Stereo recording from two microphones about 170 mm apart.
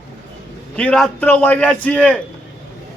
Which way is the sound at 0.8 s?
5° left (ahead or behind).